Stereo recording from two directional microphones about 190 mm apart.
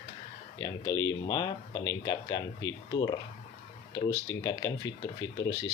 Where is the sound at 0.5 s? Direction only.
20° left (ahead or behind).